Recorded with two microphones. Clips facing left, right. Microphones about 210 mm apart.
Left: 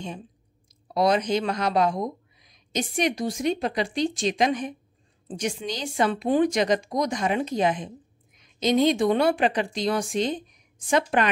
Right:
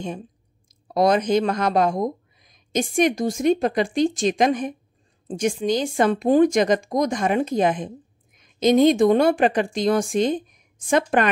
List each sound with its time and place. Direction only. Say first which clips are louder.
0.7 s speech: right 3 dB; 50° right (ahead or behind)